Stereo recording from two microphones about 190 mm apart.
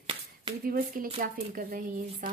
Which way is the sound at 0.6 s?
50° right (ahead or behind).